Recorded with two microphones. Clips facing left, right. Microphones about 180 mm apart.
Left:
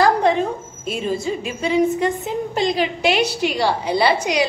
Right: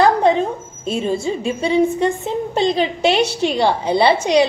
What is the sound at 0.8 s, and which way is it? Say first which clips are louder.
A woman's voice: right 3 dB; 30° right (ahead or behind).